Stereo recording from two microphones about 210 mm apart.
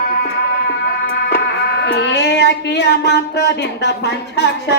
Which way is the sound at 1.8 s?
55° left (ahead or behind).